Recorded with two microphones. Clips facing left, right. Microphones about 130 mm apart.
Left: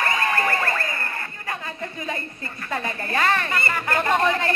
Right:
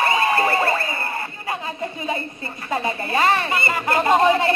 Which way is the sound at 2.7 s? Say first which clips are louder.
Right 4 dB; 15° right (ahead or behind).